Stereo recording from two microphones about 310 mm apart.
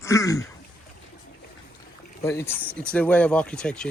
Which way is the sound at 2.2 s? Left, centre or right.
Centre.